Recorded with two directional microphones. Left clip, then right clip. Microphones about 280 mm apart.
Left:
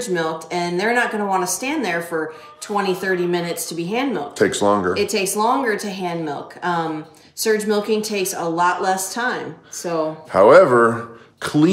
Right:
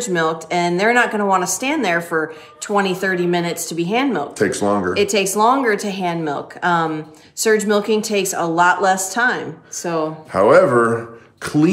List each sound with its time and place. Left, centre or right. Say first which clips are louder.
0.0 s speech: right 3 dB; centre
4.4 s speech: left 3 dB; centre
4.9 s speech: right 3 dB; centre
10.3 s speech: left 2 dB; centre